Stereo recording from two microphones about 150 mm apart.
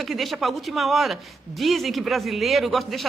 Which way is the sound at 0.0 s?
Centre (ahead or behind).